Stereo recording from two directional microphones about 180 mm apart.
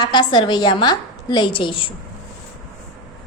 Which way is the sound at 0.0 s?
25° left (ahead or behind).